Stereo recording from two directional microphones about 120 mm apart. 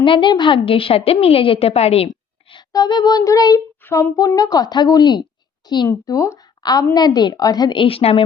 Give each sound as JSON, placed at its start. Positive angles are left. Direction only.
{"t": 0.0, "sound": "a woman's voice", "side_deg": 45}
{"t": 2.6, "sound": "a woman's voice", "side_deg": 35}
{"t": 3.8, "sound": "speech", "side_deg": 15}
{"t": 4.2, "sound": "a woman's voice", "side_deg": 30}
{"t": 5.9, "sound": "a woman's voice", "side_deg": 25}